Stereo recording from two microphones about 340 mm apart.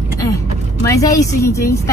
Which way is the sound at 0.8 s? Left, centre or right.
Centre.